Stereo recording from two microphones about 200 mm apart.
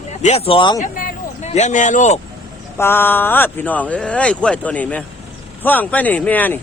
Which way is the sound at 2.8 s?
10° left (ahead or behind).